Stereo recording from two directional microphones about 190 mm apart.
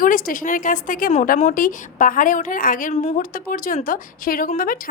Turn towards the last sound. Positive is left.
turn(degrees=45)  # may be behind; listen again after turning